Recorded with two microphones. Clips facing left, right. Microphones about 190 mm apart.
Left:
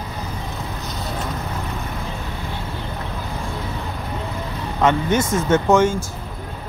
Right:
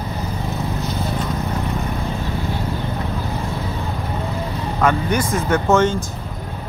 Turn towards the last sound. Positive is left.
turn(degrees=10)  # may be behind; listen again after turning